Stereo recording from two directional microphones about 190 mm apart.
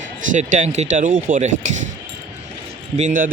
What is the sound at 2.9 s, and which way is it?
Speech, 40° right (ahead or behind).